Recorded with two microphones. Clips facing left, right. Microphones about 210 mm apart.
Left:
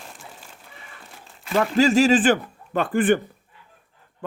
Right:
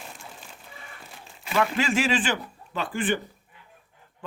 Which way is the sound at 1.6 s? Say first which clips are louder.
Left 7 dB; 40° left (ahead or behind).